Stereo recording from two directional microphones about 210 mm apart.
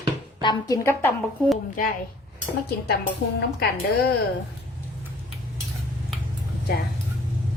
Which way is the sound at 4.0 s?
50° left (ahead or behind).